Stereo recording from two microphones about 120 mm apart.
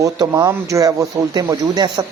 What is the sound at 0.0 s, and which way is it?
Speech, 30° right (ahead or behind).